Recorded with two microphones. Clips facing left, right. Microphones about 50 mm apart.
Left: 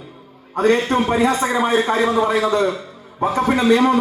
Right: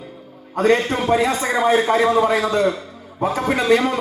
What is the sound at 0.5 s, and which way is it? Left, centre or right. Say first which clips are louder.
A man's voice: left 1 dB; left.